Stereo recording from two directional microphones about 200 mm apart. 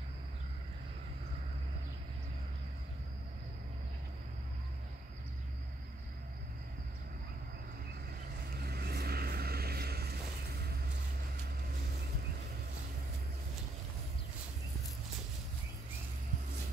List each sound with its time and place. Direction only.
8.5 s vehicle: 50° right (ahead or behind)